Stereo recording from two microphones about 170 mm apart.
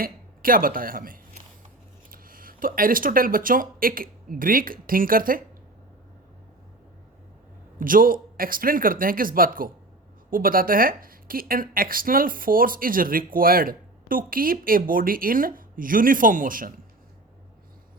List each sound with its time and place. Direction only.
0.0 s speech: 55° right (ahead or behind)
7.8 s a woman's voice: 55° right (ahead or behind)